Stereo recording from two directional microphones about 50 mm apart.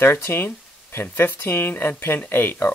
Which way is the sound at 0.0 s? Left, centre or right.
Left.